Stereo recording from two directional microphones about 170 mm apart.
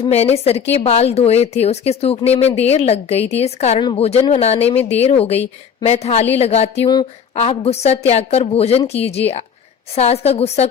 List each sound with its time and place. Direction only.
0.0 s a woman's voice: 40° left (ahead or behind)
6.8 s a woman's voice: 25° left (ahead or behind)